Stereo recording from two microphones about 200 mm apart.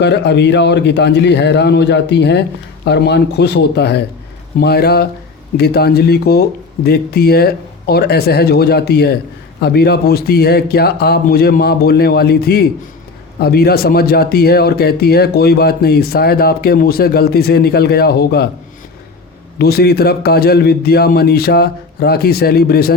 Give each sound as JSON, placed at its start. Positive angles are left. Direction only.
{"t": 0.0, "sound": "a man's voice", "side_deg": 60}
{"t": 19.5, "sound": "a man's voice", "side_deg": 50}